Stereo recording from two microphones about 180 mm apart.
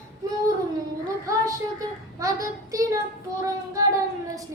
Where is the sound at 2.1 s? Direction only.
20° right (ahead or behind).